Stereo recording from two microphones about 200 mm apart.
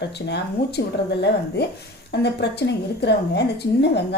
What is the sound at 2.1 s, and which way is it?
A woman's voice, 55° left (ahead or behind).